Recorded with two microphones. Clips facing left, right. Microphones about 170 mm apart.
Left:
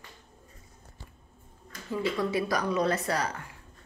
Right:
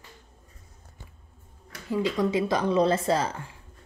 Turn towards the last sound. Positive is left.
turn(degrees=-25)  # may be behind; listen again after turning